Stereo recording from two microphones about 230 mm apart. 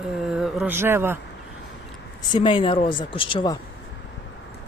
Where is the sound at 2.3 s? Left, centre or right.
Left.